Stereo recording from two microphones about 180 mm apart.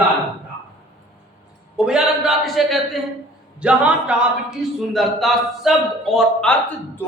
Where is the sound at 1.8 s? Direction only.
5° right (ahead or behind).